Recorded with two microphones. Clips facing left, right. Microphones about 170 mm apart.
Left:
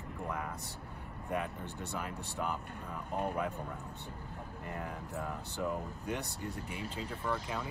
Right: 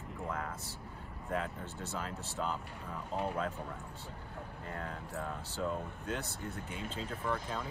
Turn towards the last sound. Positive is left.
turn(degrees=5)  # may be behind; listen again after turning